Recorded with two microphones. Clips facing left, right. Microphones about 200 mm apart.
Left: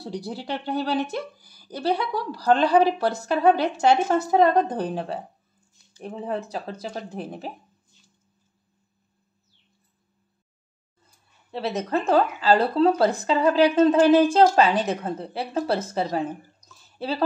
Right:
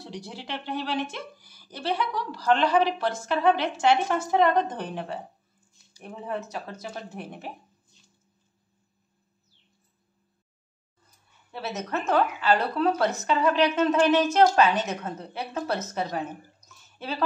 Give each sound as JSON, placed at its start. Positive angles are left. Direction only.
{"t": 0.0, "sound": "a woman's voice", "side_deg": 35}
{"t": 11.5, "sound": "a woman's voice", "side_deg": 30}